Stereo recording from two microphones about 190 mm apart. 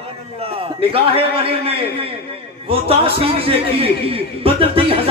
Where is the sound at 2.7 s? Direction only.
30° right (ahead or behind).